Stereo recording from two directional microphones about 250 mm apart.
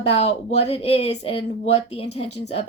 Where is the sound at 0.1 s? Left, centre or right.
Left.